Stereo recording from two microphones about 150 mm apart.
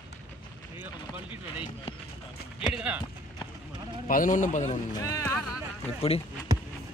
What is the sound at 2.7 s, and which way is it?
Speech, 10° right (ahead or behind).